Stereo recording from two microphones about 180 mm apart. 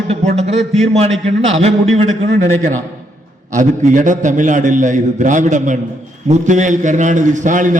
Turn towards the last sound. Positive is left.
turn(degrees=-45)  # may be behind; listen again after turning